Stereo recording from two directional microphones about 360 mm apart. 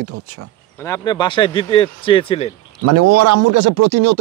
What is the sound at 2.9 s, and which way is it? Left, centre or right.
Speech, right.